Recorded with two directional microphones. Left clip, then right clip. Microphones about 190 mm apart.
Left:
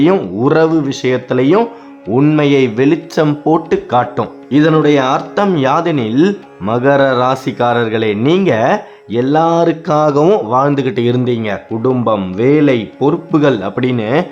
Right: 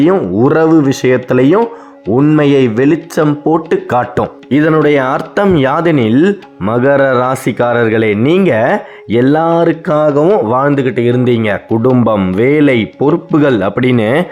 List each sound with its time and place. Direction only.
0.0 s speech: 20° right (ahead or behind)
2.0 s speech: 10° right (ahead or behind)
2.4 s speech: 20° right (ahead or behind)
10.0 s speech: centre (ahead or behind)
10.4 s speech: 25° right (ahead or behind)
10.7 s speech: centre (ahead or behind)
11.2 s speech: 20° right (ahead or behind)